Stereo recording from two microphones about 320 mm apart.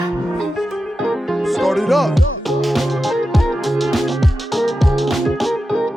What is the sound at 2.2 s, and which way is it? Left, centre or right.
Music, left.